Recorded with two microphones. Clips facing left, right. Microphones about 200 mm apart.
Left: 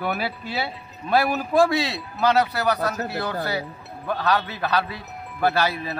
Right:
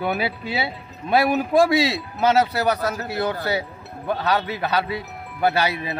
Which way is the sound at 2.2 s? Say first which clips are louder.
Right 2 dB; 25° right (ahead or behind).